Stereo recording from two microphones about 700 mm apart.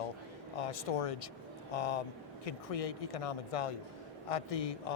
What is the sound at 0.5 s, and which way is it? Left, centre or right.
A man's voice, left.